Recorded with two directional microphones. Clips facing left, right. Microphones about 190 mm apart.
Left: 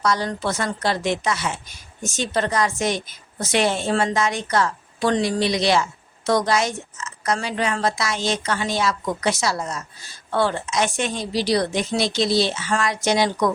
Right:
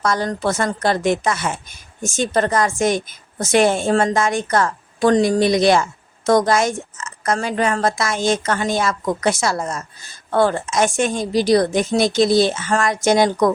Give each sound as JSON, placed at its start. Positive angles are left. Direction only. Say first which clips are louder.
{"t": 0.0, "sound": "a woman's voice", "louder": "right 3 dB", "side_deg": -50}